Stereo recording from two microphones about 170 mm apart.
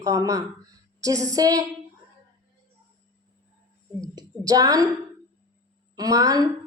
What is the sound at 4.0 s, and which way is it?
Speech, 20° right (ahead or behind).